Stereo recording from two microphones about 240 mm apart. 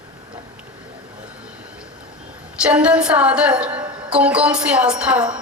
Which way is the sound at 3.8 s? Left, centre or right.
Centre.